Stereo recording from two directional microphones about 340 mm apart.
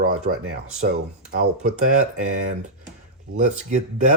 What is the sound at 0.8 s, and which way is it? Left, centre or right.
Speech, right.